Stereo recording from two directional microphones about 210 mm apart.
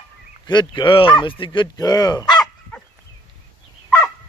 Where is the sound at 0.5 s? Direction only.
20° left (ahead or behind).